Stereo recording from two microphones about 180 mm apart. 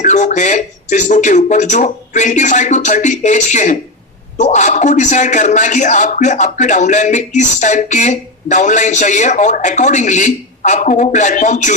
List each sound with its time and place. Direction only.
0.0 s a man's voice: 40° left (ahead or behind)